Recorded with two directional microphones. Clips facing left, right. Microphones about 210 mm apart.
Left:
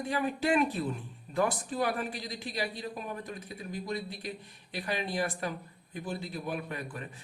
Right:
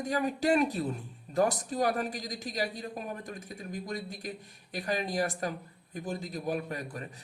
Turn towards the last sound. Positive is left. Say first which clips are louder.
# right 1 dB
turn(degrees=-40)  # may be behind; listen again after turning